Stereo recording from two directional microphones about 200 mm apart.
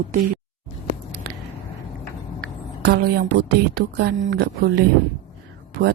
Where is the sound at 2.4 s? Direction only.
50° right (ahead or behind).